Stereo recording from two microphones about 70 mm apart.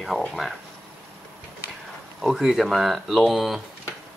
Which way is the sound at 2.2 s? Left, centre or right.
Centre.